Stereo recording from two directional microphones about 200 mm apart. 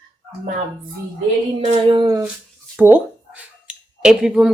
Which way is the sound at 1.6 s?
25° right (ahead or behind).